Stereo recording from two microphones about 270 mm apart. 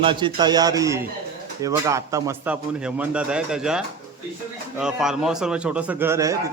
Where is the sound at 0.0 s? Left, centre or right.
Centre.